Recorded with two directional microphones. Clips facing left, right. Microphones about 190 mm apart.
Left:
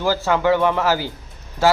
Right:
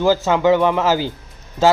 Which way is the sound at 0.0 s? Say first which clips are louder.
Right 4 dB; 20° right (ahead or behind).